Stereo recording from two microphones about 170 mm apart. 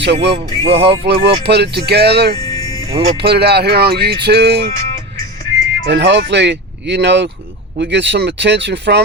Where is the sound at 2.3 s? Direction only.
20° left (ahead or behind).